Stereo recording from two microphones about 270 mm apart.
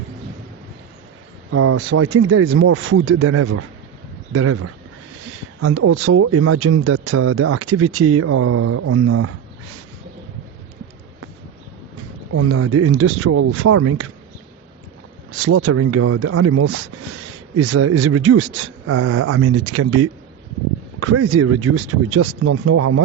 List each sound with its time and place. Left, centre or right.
1.5 s speech: right
12.3 s speech: right
15.4 s speech: right